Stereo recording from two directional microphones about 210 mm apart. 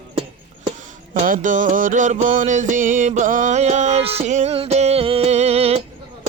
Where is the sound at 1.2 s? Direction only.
40° right (ahead or behind).